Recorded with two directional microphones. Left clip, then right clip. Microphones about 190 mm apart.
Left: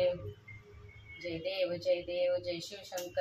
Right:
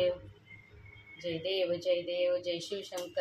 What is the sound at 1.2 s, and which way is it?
A woman's voice, 35° right (ahead or behind).